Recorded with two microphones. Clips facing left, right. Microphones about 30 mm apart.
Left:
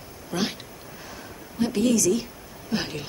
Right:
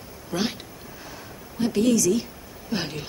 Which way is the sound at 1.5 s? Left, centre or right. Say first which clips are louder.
Right 1 dB; centre.